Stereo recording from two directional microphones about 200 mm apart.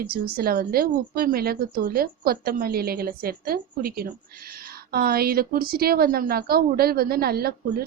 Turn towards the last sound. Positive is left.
turn(degrees=-50)  # may be behind; listen again after turning